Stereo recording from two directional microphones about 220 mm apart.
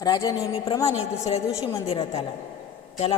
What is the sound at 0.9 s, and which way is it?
A man's voice, 30° left (ahead or behind).